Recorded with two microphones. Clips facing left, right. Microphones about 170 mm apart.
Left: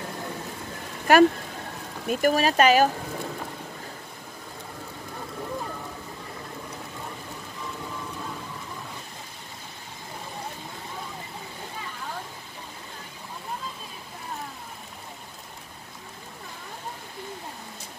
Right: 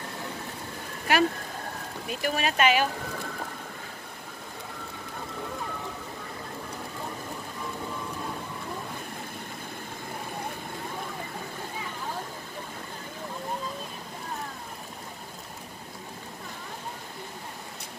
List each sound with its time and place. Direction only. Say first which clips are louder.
1.1 s speech: left 7 dB; 45° left (ahead or behind)